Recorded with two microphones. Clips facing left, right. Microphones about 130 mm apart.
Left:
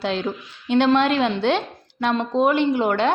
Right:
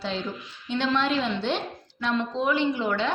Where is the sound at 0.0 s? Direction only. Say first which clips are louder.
Left 6 dB; 70° left (ahead or behind).